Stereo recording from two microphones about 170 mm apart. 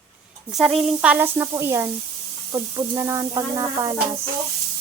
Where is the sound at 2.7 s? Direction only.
20° right (ahead or behind).